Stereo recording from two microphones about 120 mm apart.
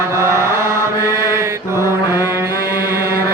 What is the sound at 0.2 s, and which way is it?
Mantra, 20° right (ahead or behind).